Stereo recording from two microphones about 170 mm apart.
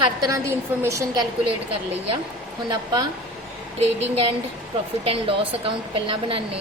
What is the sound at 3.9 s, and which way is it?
A woman's voice, 40° right (ahead or behind).